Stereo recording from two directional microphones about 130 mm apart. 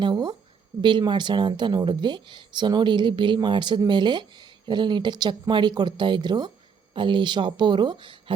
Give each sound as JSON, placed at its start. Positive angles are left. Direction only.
{"t": 0.0, "sound": "speech", "side_deg": -35}